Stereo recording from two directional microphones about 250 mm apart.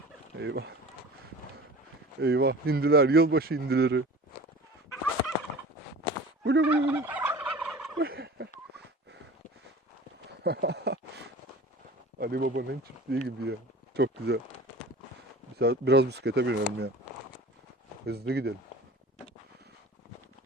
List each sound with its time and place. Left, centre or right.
0.3 s speech: right
2.2 s speech: right
6.4 s gobble: right
6.7 s fowl: centre
7.9 s a sound: right
10.4 s a sound: right
12.2 s speech: right
15.5 s speech: right
18.0 s speech: right